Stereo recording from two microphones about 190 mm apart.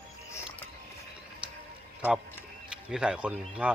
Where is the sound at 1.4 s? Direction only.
5° right (ahead or behind).